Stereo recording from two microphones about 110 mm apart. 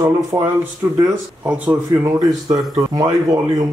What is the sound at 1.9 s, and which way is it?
Speech, 30° right (ahead or behind).